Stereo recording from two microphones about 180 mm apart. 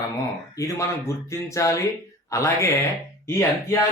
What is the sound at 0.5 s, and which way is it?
Speech, 20° left (ahead or behind).